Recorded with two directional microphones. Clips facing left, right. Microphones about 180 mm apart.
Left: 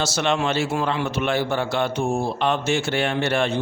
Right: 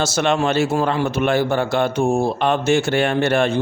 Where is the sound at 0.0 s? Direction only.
50° right (ahead or behind).